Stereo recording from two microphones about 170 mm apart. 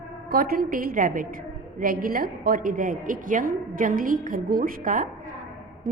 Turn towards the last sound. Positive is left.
turn(degrees=-55)  # may be behind; listen again after turning